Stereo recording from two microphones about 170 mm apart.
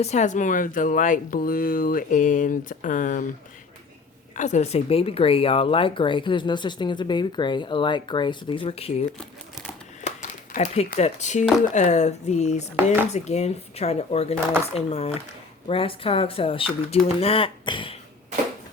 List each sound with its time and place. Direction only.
0.0 s speech: 40° left (ahead or behind)
4.4 s speech: 45° left (ahead or behind)
10.0 s a sound: 45° left (ahead or behind)
11.7 s speech: 45° left (ahead or behind)